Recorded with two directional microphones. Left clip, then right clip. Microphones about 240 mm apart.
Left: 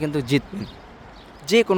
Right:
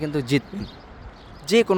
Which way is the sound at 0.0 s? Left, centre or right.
Centre.